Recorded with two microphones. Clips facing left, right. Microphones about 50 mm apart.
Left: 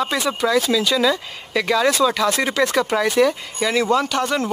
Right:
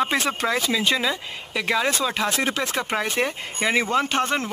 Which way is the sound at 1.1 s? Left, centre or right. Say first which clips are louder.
Left 6 dB; centre.